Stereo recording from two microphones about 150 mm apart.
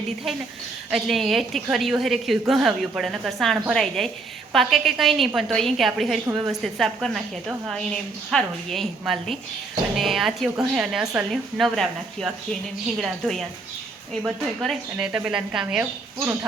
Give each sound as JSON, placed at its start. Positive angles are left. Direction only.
{"t": 0.9, "sound": "a woman's voice", "side_deg": 0}
{"t": 16.1, "sound": "speech", "side_deg": -15}